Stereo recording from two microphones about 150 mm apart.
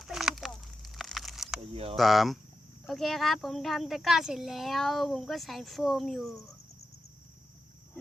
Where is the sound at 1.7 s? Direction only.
40° right (ahead or behind).